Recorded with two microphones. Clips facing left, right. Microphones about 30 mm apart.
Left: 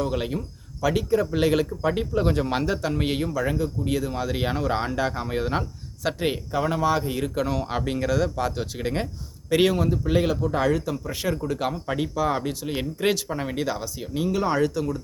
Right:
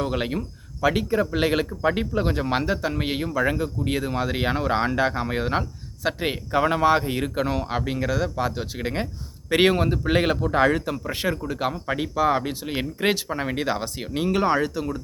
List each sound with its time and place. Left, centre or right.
0.0 s speech: right
3.3 s speech: right
6.5 s speech: right
7.6 s speech: centre
9.5 s speech: right
10.5 s speech: right
11.3 s speech: centre
13.8 s speech: right
14.4 s speech: centre